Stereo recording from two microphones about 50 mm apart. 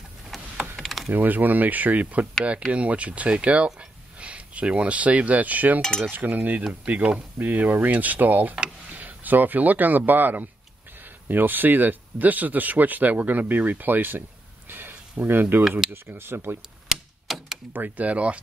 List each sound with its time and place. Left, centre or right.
0.7 s mechanisms: centre
1.1 s speech: right
5.8 s cutlery: centre
6.0 s speech: right
7.3 s speech: right
14.7 s a sound: right
15.9 s speech: right
16.9 s typewriter: centre
17.7 s speech: right